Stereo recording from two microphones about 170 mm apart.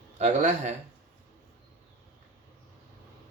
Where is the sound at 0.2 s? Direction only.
45° right (ahead or behind).